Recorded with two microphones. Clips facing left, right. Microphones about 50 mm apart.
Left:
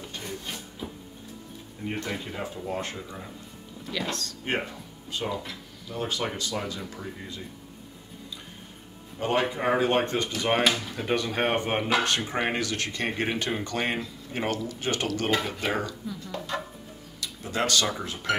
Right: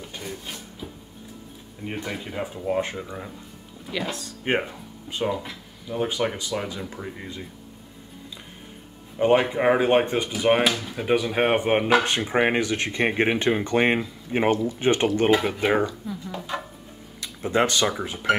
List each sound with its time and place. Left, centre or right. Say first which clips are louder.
0.0 s a sound: right 1 dB; centre
1.9 s speech: right 1 dB; centre; by 7.4 s right
9.2 s speech: right 7 dB; right
17.2 s speech: right 7 dB; right